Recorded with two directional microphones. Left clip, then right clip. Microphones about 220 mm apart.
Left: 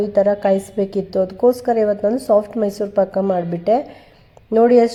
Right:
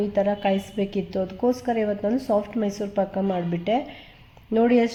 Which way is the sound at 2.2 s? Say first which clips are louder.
Left 8 dB; 15° left (ahead or behind).